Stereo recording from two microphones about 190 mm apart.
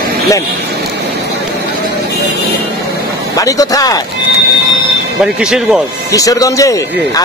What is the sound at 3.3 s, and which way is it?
Speech, 20° left (ahead or behind).